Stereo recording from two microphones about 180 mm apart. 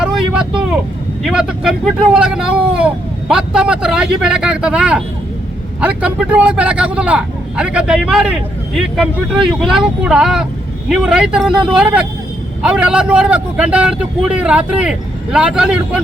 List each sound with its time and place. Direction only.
1.2 s a man's voice: 5° right (ahead or behind)